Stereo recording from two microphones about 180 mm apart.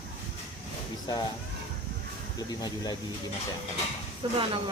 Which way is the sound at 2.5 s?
20° left (ahead or behind).